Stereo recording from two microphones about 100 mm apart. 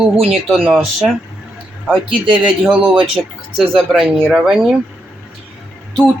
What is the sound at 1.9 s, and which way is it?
A man's voice, 5° right (ahead or behind).